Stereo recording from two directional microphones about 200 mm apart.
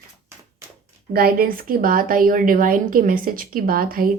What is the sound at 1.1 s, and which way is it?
Speech, 50° right (ahead or behind).